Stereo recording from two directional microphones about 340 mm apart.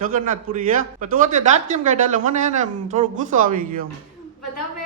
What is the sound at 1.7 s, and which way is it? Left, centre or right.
A man's voice, right.